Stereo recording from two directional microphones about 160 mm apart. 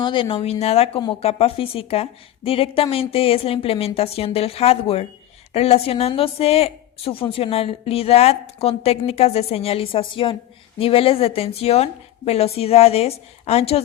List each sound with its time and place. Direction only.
0.0 s a woman's voice: 30° left (ahead or behind)